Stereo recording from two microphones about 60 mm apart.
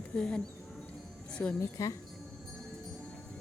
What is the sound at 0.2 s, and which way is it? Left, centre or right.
Speech, centre.